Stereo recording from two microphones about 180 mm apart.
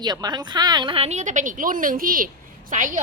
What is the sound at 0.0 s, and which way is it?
A woman's voice, 25° right (ahead or behind).